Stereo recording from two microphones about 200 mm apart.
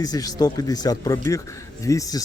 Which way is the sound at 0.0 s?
20° left (ahead or behind).